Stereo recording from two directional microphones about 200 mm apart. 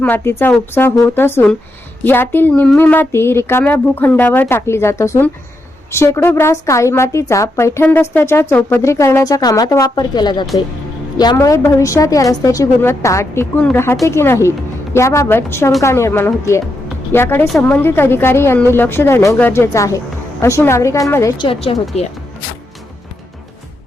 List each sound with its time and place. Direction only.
0.0 s a woman's voice: 10° left (ahead or behind); by 22.0 s 30° left (ahead or behind)